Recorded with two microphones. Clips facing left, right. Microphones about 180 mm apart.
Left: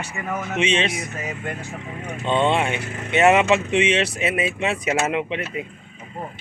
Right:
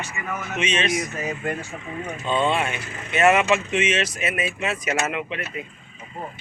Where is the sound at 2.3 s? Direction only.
25° left (ahead or behind).